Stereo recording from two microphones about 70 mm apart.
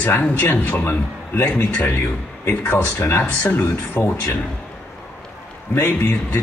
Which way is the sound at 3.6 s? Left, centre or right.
Left.